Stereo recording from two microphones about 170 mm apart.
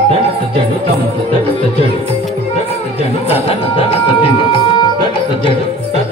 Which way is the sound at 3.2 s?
35° left (ahead or behind).